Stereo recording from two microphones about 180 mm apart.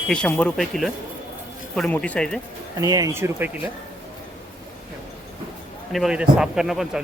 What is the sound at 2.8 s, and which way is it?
Speech, 20° right (ahead or behind).